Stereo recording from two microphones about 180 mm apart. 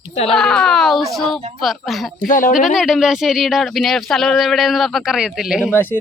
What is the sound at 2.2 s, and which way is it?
Speech, 45° left (ahead or behind).